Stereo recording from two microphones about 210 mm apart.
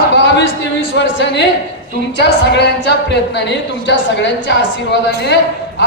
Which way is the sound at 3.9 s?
55° left (ahead or behind).